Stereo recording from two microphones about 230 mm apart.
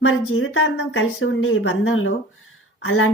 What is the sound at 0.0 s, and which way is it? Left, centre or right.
Speech, left.